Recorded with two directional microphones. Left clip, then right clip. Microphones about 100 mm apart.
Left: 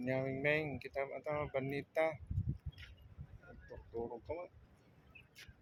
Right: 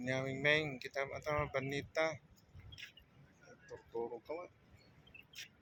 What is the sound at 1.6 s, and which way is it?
Speech, 35° left (ahead or behind).